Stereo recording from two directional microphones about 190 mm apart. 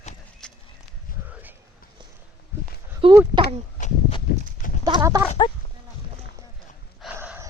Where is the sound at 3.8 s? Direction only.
35° left (ahead or behind).